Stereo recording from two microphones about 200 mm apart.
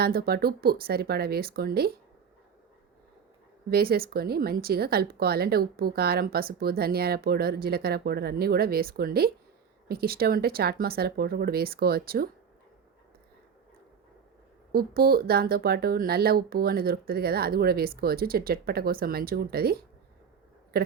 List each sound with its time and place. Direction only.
0.0 s speech: 50° right (ahead or behind)
3.7 s speech: 50° right (ahead or behind)
14.7 s speech: 50° right (ahead or behind)